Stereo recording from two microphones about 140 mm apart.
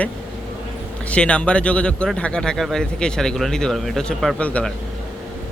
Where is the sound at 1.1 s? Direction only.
10° left (ahead or behind).